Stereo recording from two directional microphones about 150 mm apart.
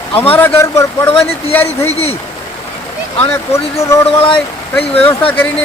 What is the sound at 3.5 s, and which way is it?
Speech, 20° left (ahead or behind).